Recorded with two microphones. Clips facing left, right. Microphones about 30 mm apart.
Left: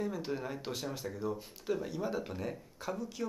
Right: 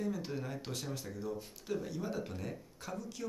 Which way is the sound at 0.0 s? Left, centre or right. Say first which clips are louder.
Left 2 dB; centre.